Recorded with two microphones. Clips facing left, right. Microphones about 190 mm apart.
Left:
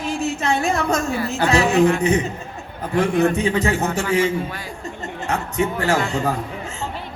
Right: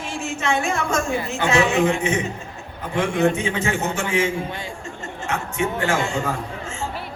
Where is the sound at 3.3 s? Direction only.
35° left (ahead or behind).